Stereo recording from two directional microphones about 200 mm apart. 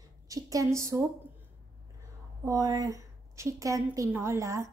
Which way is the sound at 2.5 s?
20° right (ahead or behind).